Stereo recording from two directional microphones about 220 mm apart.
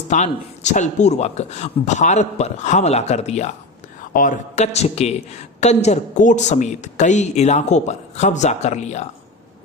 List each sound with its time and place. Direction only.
0.1 s a woman's voice: 30° left (ahead or behind)